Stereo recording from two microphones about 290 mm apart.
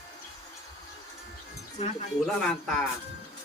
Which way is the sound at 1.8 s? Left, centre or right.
Left.